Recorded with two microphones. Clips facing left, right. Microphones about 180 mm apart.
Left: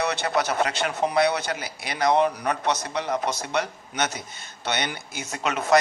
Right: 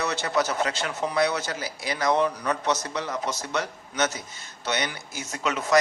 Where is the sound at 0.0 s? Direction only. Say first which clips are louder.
Left 1 dB; 60° left (ahead or behind).